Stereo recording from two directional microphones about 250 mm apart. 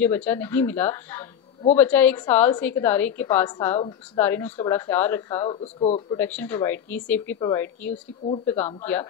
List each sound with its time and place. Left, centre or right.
0.0 s a woman's voice: centre
4.2 s a woman's voice: centre
5.6 s speech: left
6.1 s a woman's voice: centre